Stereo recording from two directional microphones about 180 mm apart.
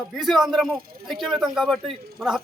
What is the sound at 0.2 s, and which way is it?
A man's voice, centre (ahead or behind).